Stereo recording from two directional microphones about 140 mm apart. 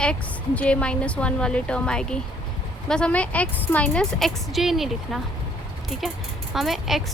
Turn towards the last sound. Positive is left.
turn(degrees=0)  # may be behind; listen again after turning